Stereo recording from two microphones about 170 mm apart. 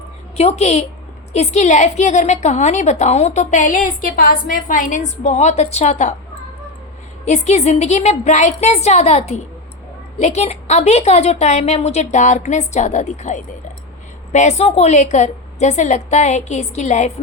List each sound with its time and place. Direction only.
0.3 s a woman's voice: 40° left (ahead or behind)
7.3 s a woman's voice: 40° left (ahead or behind)